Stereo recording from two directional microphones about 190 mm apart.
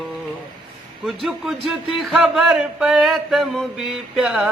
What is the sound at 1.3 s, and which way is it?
A man's voice, centre (ahead or behind).